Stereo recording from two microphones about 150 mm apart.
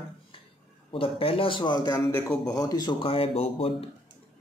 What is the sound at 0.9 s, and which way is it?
A man's voice, 40° left (ahead or behind).